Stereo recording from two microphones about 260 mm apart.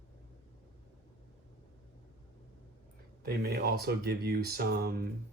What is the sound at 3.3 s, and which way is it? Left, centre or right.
Speech, right.